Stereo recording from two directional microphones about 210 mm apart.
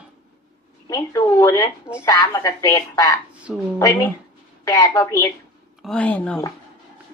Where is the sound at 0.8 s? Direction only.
15° left (ahead or behind).